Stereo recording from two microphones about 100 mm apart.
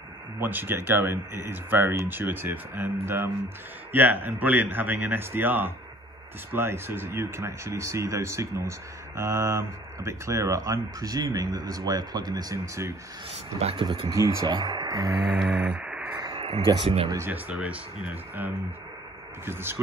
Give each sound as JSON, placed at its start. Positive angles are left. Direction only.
{"t": 0.4, "sound": "speech", "side_deg": -20}
{"t": 13.6, "sound": "speech", "side_deg": -90}
{"t": 13.8, "sound": "speech", "side_deg": -55}
{"t": 14.1, "sound": "speech", "side_deg": -30}
{"t": 15.3, "sound": "music", "side_deg": 0}
{"t": 15.6, "sound": "a sound", "side_deg": -10}
{"t": 16.3, "sound": "a sound", "side_deg": -90}
{"t": 17.3, "sound": "speech", "side_deg": -15}